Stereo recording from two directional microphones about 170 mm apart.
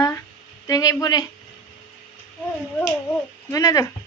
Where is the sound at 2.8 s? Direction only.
10° left (ahead or behind).